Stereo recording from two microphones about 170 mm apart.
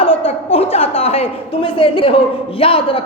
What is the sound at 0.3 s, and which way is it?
A woman's voice, 35° left (ahead or behind).